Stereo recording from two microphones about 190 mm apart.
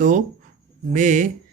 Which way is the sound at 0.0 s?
45° right (ahead or behind).